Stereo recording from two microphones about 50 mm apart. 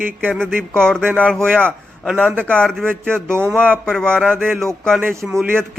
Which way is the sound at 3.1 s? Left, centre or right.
Right.